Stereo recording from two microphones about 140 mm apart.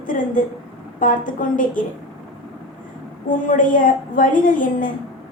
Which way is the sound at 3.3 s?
70° left (ahead or behind).